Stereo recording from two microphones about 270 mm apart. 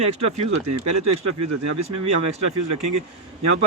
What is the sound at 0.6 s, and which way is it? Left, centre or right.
Speech, right.